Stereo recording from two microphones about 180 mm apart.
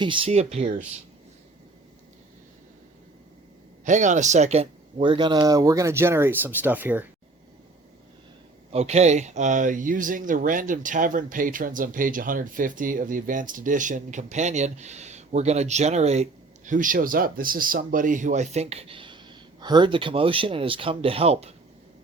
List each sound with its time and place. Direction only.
0.0 s a man's voice: 30° right (ahead or behind)
3.8 s speech: 45° right (ahead or behind); by 7.1 s 10° right (ahead or behind)
8.7 s a man's voice: 35° right (ahead or behind)